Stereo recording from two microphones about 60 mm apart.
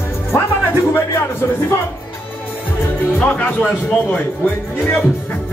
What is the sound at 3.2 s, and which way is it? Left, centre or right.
Speech, left.